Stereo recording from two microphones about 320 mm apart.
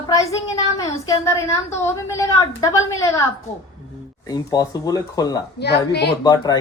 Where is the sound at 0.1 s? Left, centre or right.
Centre.